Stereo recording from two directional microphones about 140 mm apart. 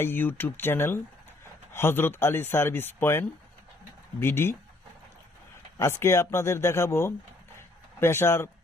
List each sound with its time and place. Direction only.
0.0 s speech: 15° left (ahead or behind)
5.7 s speech: 20° left (ahead or behind)